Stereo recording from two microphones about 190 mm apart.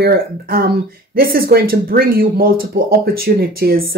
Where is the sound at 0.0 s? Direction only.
55° right (ahead or behind).